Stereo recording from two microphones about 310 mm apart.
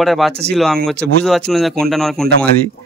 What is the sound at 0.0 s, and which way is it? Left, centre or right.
Speech, centre.